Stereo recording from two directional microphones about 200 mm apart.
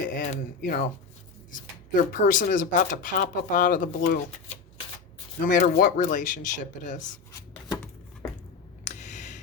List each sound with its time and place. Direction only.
0.2 s speech: 45° left (ahead or behind)
5.5 s speech: 40° left (ahead or behind)
8.8 s a sound: 35° left (ahead or behind)